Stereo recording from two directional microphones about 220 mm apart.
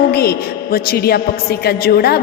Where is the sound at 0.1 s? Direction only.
45° left (ahead or behind).